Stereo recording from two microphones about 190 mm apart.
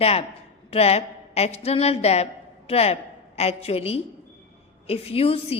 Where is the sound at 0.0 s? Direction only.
30° left (ahead or behind).